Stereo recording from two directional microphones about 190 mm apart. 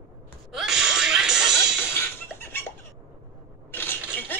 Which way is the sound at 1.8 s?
10° left (ahead or behind).